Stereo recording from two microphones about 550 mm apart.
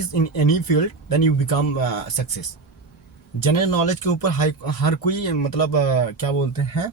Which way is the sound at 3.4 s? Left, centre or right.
Left.